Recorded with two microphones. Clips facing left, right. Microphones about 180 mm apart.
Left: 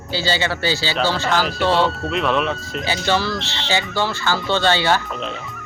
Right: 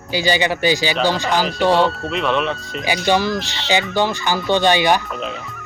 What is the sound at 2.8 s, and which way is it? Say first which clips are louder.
Speech: right 3 dB; 15° right (ahead or behind).